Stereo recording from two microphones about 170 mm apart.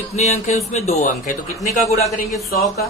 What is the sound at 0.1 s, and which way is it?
A man's voice, 45° left (ahead or behind).